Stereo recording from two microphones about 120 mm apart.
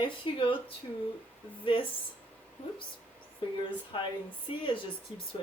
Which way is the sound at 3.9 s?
45° left (ahead or behind).